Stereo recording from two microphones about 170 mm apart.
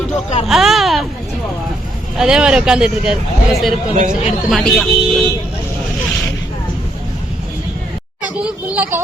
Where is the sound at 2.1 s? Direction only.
5° right (ahead or behind).